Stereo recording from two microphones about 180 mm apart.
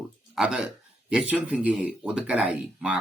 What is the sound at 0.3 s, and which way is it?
Speech, 5° right (ahead or behind).